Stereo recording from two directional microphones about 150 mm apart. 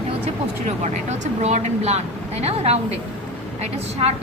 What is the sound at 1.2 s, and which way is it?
Speech, 50° right (ahead or behind).